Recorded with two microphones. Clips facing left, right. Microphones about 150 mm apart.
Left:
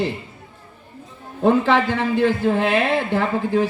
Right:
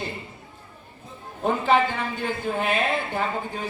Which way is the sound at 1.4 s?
75° left (ahead or behind).